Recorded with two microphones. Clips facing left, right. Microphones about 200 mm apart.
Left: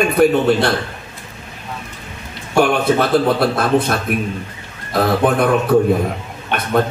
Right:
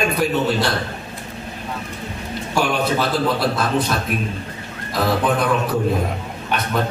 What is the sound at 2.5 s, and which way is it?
A man's voice, 55° left (ahead or behind).